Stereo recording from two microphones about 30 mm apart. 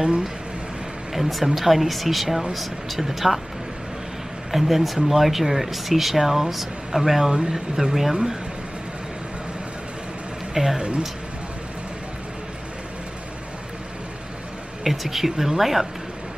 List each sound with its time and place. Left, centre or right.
1.1 s speech: centre
4.5 s speech: centre
7.3 s speech: right
7.7 s speech: centre
10.5 s speech: centre
14.8 s speech: centre